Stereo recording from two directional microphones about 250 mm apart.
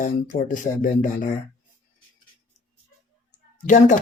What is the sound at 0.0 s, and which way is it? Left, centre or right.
Speech, left.